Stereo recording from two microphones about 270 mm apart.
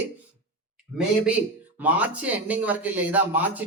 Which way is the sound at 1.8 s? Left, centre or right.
Centre.